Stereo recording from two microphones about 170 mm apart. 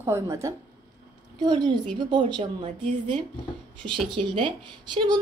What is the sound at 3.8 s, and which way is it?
Speech, 30° right (ahead or behind).